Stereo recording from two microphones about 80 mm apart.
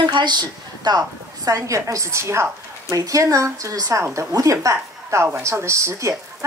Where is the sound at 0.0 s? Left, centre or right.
Right.